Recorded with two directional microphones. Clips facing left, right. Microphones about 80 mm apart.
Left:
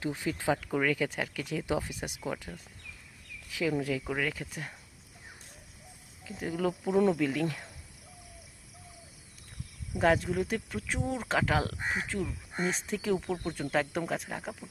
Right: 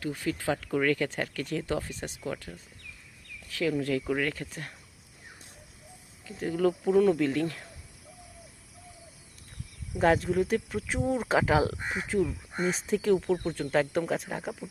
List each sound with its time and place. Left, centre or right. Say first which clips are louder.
0.0 s speech: right 1 dB; centre
6.3 s speech: right 5 dB; centre
9.9 s speech: right 2 dB; centre